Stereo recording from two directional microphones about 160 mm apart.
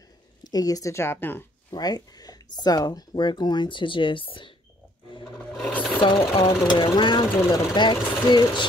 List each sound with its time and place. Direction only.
0.4 s speech: 25° left (ahead or behind)
1.8 s speech: 25° left (ahead or behind)
5.2 s a sound: 5° left (ahead or behind)
6.0 s speech: 35° left (ahead or behind)